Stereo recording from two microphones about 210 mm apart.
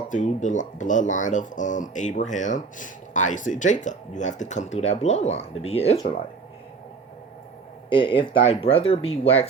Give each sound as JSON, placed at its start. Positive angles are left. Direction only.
{"t": 0.1, "sound": "speech", "side_deg": 35}
{"t": 7.9, "sound": "speech", "side_deg": 25}